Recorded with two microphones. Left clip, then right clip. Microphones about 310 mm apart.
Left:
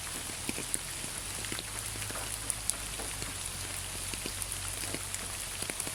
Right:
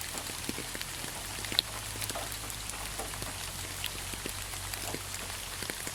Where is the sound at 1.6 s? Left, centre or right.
Right.